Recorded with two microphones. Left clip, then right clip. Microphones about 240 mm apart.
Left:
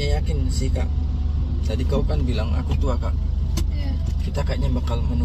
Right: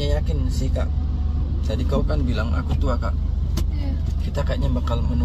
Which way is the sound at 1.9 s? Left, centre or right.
Centre.